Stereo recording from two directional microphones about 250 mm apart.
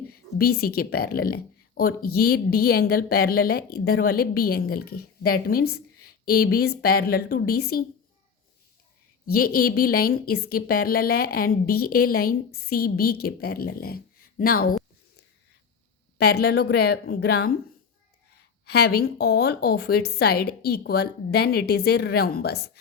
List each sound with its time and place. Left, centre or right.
0.1 s speech: left
9.3 s speech: left
16.1 s speech: left
18.6 s speech: left